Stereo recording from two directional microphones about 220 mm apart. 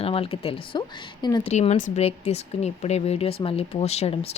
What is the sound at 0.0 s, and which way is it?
Speech, 25° left (ahead or behind).